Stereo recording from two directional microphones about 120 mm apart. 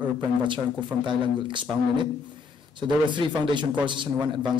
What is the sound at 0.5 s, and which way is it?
Speech, 40° right (ahead or behind).